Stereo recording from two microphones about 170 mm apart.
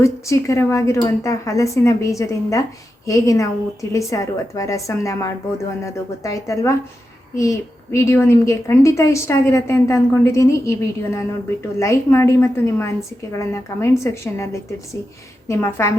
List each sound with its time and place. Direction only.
0.0 s a woman's voice: 15° left (ahead or behind)